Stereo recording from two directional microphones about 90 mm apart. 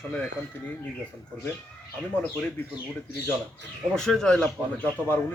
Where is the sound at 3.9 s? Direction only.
5° left (ahead or behind).